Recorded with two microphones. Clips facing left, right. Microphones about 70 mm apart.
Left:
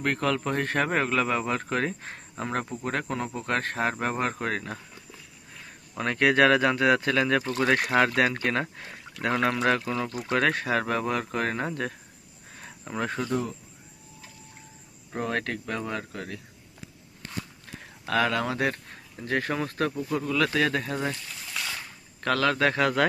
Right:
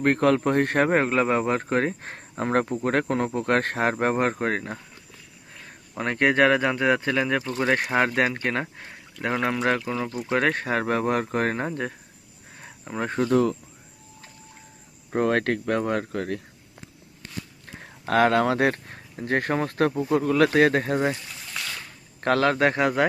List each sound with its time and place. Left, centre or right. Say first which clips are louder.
0.0 s speech: right 6 dB; right
0.9 s speech: right 4 dB; right
4.1 s speech: right 5 dB; right
6.0 s speech: right 1 dB; right
10.5 s speech: right 2 dB; right
11.6 s speech: right 2 dB; right
12.5 s cricket: right 1 dB; centre
13.0 s speech: right 4 dB; right
13.3 s speech: right 12 dB; right
15.1 s speech: right 7 dB; right
17.7 s speech: right 5 dB; right
22.2 s speech: right 3 dB; right